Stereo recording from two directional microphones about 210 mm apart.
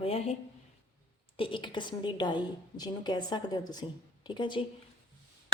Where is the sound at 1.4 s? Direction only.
25° left (ahead or behind).